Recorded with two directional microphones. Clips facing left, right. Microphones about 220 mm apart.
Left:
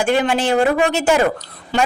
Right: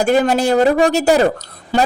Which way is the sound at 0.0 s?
40° right (ahead or behind).